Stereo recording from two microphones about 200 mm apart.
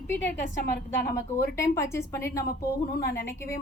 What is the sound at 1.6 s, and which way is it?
Speech, 15° left (ahead or behind).